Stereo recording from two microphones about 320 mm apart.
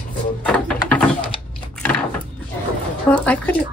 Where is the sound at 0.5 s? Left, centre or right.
Centre.